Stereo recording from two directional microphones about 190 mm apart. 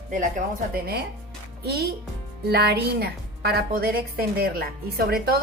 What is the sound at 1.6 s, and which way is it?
A woman's voice, 55° right (ahead or behind).